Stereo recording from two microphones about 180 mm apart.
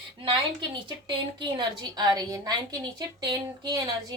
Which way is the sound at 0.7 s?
25° right (ahead or behind).